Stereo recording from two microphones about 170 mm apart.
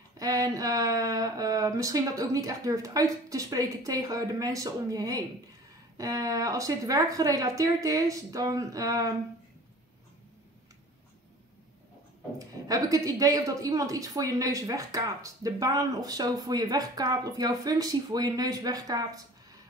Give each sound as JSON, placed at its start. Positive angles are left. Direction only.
{"t": 0.2, "sound": "speech", "side_deg": -20}
{"t": 12.4, "sound": "speech", "side_deg": -20}